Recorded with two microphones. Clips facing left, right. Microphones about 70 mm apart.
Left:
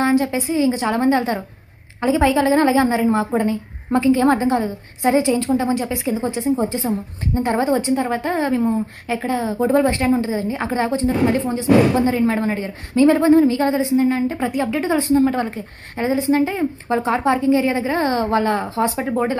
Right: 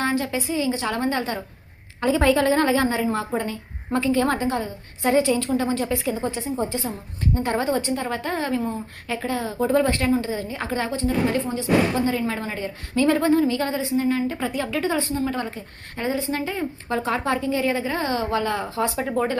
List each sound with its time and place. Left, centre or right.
0.0 s a woman's voice: left
2.0 s a woman's voice: centre
3.1 s a woman's voice: left
15.1 s a woman's voice: left
16.0 s a woman's voice: left